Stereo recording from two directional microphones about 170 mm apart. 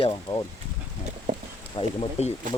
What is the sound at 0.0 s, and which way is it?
Speech, 25° left (ahead or behind).